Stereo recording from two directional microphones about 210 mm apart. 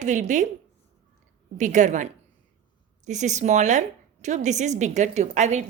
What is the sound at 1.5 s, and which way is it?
A woman's voice, 35° right (ahead or behind).